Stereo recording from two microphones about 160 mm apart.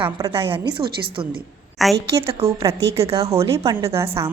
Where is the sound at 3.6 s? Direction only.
20° right (ahead or behind).